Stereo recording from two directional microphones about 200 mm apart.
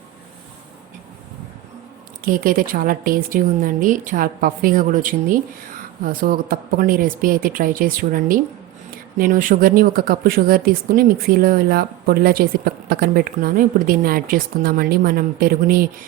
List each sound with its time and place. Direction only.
2.2 s speech: 45° right (ahead or behind)